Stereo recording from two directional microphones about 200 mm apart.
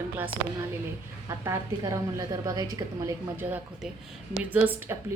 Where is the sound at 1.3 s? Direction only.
15° right (ahead or behind).